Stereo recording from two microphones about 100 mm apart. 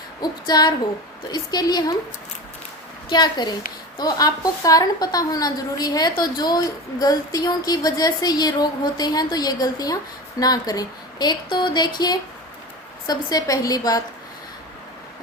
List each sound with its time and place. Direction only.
0.2 s a woman's voice: 45° left (ahead or behind)
3.1 s a woman's voice: 45° left (ahead or behind)